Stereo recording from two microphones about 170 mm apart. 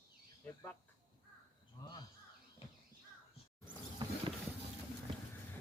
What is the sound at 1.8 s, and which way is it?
Speech, 25° left (ahead or behind).